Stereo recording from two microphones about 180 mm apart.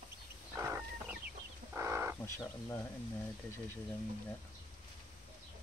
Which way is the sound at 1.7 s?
15° right (ahead or behind).